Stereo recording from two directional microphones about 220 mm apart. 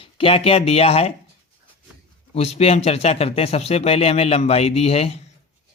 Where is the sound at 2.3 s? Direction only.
30° left (ahead or behind).